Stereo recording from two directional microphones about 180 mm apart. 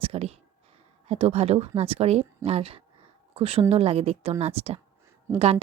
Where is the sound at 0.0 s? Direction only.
35° right (ahead or behind).